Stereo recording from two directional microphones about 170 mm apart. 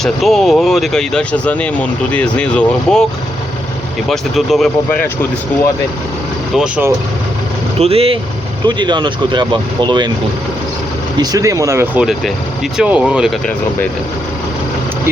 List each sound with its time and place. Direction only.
0.0 s speech: centre (ahead or behind)
4.1 s speech: centre (ahead or behind)
6.6 s speech: 10° right (ahead or behind)
7.8 s speech: 35° right (ahead or behind)
11.2 s speech: 20° right (ahead or behind)
11.9 s speech: centre (ahead or behind)